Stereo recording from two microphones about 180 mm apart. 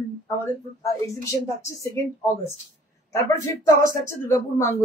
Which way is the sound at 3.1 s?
20° left (ahead or behind).